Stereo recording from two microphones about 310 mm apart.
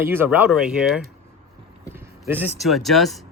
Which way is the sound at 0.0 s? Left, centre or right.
Centre.